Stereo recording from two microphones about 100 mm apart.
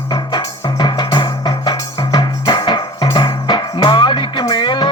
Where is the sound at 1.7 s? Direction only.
45° left (ahead or behind).